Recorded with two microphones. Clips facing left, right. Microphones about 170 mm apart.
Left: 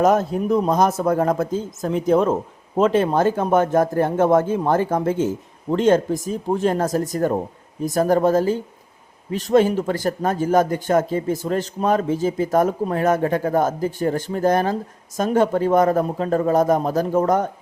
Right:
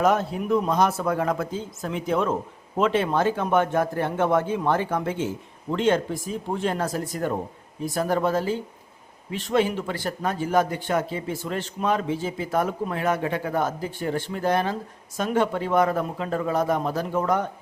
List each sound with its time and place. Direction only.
0.0 s speech: 45° left (ahead or behind)